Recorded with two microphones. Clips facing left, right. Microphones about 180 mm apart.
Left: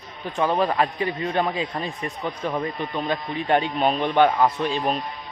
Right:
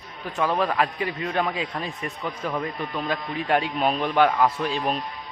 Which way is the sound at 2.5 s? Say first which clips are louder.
Left 2 dB; 25° left (ahead or behind).